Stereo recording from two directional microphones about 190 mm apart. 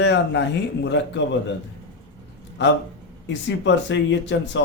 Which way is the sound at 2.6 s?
70° left (ahead or behind).